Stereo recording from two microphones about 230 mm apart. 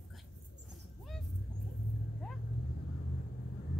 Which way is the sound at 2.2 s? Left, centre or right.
Centre.